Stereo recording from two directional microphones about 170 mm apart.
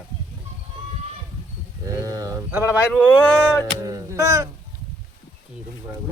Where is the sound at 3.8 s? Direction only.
20° right (ahead or behind).